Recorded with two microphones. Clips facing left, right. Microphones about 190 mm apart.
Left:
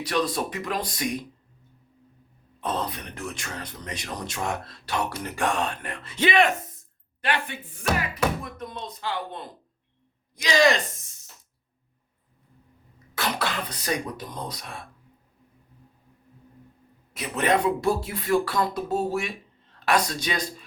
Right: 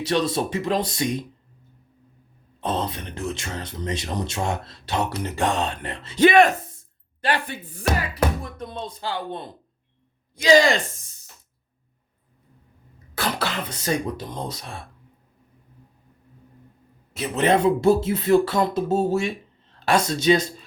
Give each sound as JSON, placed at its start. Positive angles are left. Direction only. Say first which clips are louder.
{"t": 0.0, "sound": "speech", "louder": "right 3 dB", "side_deg": -25}
{"t": 2.6, "sound": "speech", "louder": "right 3 dB", "side_deg": -25}
{"t": 6.1, "sound": "speech", "louder": "right 6 dB", "side_deg": -45}
{"t": 13.7, "sound": "speech", "louder": "right 4 dB", "side_deg": -25}
{"t": 17.2, "sound": "speech", "louder": "right 4 dB", "side_deg": -25}